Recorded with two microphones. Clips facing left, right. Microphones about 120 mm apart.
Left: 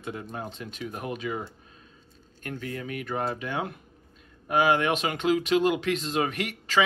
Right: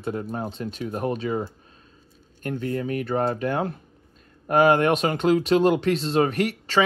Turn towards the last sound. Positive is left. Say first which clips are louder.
# right 4 dB
turn(degrees=-40)  # may be behind; listen again after turning